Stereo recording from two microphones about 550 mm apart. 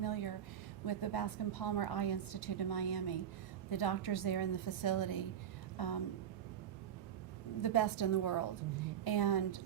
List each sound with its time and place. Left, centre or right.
0.0 s a sound: left
0.9 s a woman's voice: left
7.6 s a woman's voice: left